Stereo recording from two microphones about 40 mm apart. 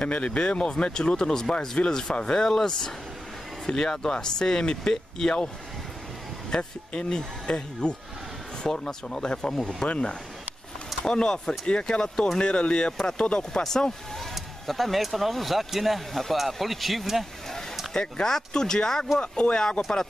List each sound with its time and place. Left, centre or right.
0.0 s speech: left
6.5 s speech: left
11.1 s speech: centre
14.3 s speech: centre
18.1 s speech: centre